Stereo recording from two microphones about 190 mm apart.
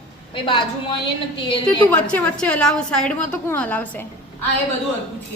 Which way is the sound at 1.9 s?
10° left (ahead or behind).